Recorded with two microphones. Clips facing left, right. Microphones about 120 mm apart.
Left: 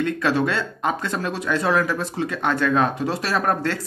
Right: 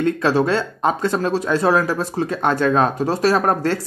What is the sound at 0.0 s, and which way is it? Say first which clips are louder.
Speech: right 4 dB; 35° right (ahead or behind).